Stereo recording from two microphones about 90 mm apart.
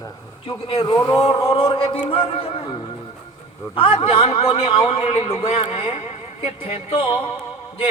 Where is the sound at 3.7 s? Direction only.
90° left.